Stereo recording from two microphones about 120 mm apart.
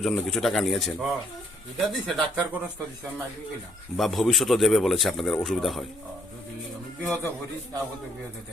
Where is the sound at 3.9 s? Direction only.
Centre (ahead or behind).